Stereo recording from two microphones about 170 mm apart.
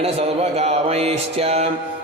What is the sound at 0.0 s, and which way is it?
Music, 35° right (ahead or behind).